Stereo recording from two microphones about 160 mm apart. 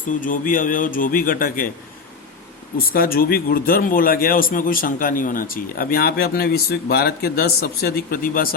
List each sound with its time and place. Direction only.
0.1 s speech: 55° left (ahead or behind)
2.7 s speech: 65° left (ahead or behind)